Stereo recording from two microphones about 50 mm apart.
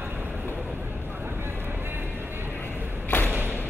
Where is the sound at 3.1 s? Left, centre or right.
Left.